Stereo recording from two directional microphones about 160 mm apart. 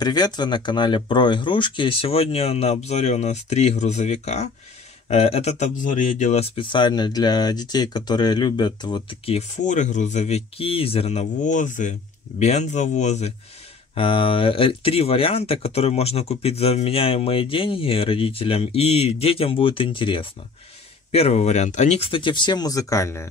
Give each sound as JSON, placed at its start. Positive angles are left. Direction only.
{"t": 0.0, "sound": "speech", "side_deg": 25}
{"t": 9.7, "sound": "speech", "side_deg": 50}
{"t": 13.9, "sound": "speech", "side_deg": 35}